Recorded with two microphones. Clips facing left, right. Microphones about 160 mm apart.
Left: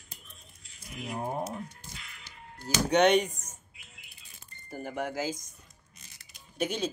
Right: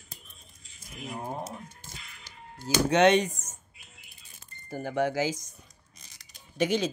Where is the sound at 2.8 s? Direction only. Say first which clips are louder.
Right 1 dB; 90° right.